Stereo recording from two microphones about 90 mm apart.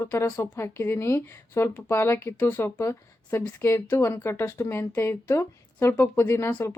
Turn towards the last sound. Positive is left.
turn(degrees=30)  # may be behind; listen again after turning